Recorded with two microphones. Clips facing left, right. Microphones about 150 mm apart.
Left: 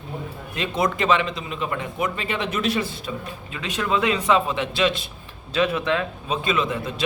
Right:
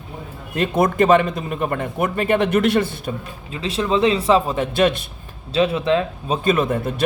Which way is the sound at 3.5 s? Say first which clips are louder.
Right 4 dB; 30° right (ahead or behind).